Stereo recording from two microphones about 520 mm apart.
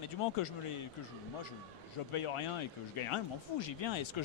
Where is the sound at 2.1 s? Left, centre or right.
Left.